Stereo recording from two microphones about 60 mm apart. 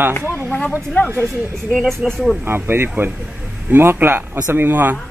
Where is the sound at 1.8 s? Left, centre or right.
Centre.